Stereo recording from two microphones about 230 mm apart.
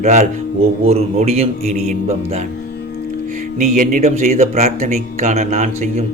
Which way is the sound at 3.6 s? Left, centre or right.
Right.